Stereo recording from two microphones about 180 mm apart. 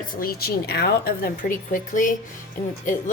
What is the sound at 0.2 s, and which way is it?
A woman's voice, 60° left (ahead or behind).